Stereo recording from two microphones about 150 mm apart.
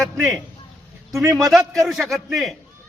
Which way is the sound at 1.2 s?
20° right (ahead or behind).